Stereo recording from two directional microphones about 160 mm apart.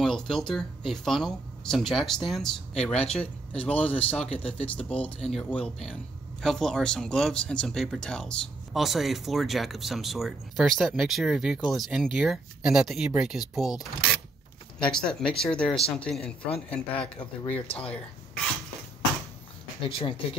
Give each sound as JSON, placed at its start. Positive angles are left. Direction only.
{"t": 0.0, "sound": "speech", "side_deg": 5}
{"t": 14.9, "sound": "speech", "side_deg": 5}
{"t": 19.8, "sound": "speech", "side_deg": 35}